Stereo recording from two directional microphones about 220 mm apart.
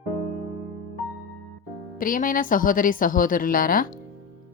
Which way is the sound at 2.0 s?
40° left (ahead or behind).